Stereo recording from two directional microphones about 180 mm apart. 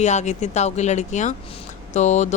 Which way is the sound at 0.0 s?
40° left (ahead or behind).